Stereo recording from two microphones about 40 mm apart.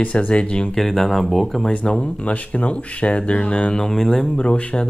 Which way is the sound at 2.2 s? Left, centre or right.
Left.